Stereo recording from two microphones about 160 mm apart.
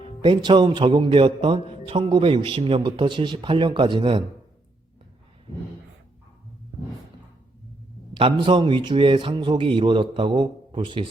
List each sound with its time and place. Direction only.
0.2 s a man's voice: 30° right (ahead or behind)
8.1 s a man's voice: 30° right (ahead or behind)